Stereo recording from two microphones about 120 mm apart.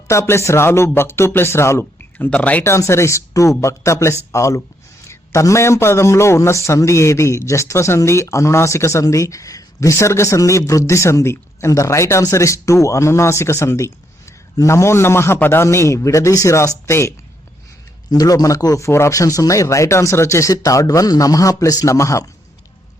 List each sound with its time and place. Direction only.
0.1 s a man's voice: 25° left (ahead or behind)
2.1 s a man's voice: 10° left (ahead or behind)
18.1 s a man's voice: 30° left (ahead or behind)